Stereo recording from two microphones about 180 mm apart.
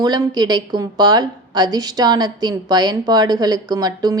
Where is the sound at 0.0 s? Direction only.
20° right (ahead or behind).